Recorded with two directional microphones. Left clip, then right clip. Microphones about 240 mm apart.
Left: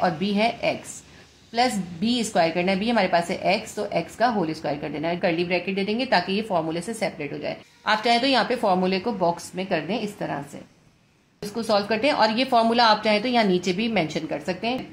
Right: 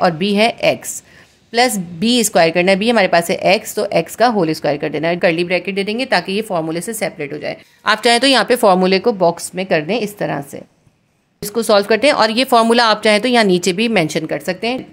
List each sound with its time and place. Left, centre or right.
0.0 s a woman's voice: right
11.4 s a woman's voice: right